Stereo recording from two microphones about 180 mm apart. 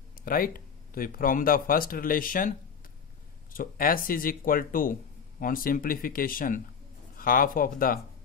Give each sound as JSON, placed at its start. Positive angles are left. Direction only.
{"t": 0.2, "sound": "speech", "side_deg": 55}
{"t": 3.5, "sound": "speech", "side_deg": 50}